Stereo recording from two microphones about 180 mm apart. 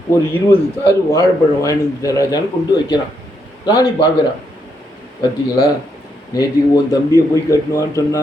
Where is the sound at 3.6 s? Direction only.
20° left (ahead or behind).